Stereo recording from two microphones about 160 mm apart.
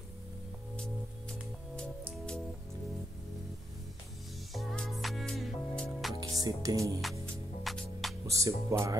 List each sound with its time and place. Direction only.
4.6 s music: centre (ahead or behind)
6.1 s music: 25° right (ahead or behind)
7.6 s music: centre (ahead or behind)
8.3 s music: 20° right (ahead or behind)